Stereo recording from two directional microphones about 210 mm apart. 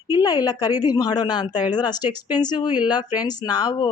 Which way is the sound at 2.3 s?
20° left (ahead or behind).